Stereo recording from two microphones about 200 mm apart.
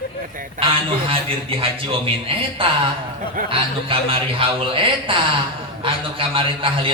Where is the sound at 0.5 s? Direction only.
25° right (ahead or behind).